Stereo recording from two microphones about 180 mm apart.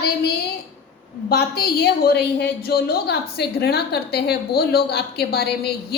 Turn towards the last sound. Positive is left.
turn(degrees=60)  # may be behind; listen again after turning